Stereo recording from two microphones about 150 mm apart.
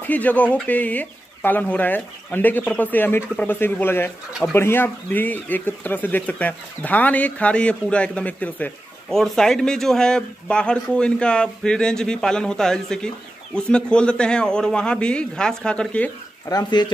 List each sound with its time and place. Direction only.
0.1 s speech: 10° left (ahead or behind)
4.3 s speech: centre (ahead or behind)
4.6 s speech: 15° left (ahead or behind)
16.4 s speech: 25° left (ahead or behind)